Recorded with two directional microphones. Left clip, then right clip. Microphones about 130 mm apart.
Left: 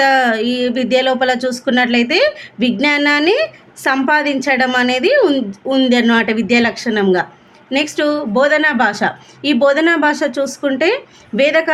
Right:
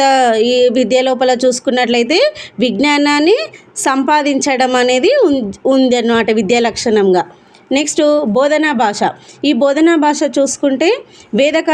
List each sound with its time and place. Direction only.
0.0 s a woman's voice: 35° right (ahead or behind)